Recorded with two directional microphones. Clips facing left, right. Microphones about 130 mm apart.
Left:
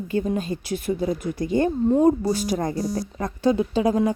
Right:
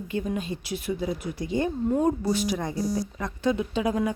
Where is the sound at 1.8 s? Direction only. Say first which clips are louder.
Left 6 dB; 35° left (ahead or behind); by 3.0 s 50° left (ahead or behind).